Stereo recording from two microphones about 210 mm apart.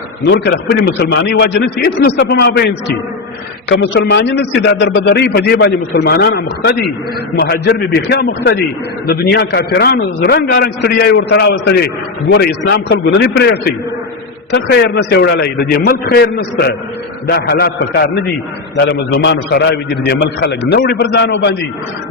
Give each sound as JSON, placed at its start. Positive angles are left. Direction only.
{"t": 0.3, "sound": "a man's voice", "side_deg": 55}